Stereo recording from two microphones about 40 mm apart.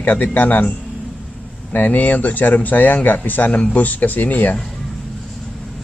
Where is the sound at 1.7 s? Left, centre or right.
Left.